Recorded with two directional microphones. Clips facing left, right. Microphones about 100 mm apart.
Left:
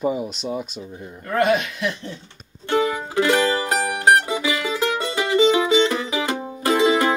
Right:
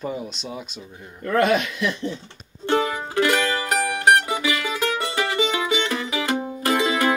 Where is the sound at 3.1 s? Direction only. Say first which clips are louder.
Left 2 dB; 20° left (ahead or behind).